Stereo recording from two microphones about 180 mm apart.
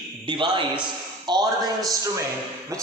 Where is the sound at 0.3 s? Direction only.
25° right (ahead or behind).